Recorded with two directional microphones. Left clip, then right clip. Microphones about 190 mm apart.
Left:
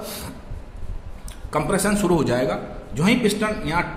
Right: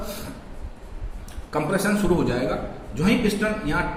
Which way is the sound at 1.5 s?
55° left (ahead or behind).